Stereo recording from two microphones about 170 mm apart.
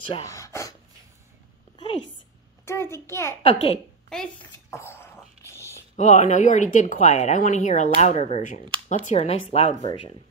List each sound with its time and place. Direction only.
0.2 s a sound: 20° left (ahead or behind)
2.6 s a child's voice: 15° left (ahead or behind)
3.4 s speech: 35° left (ahead or behind)
4.6 s a sound: 15° left (ahead or behind)
5.9 s speech: 45° left (ahead or behind)
9.7 s speech: 45° right (ahead or behind)